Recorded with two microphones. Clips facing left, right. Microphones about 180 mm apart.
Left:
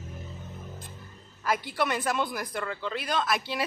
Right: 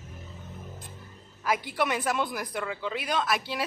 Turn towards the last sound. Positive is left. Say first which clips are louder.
# even
turn(degrees=-5)  # may be behind; listen again after turning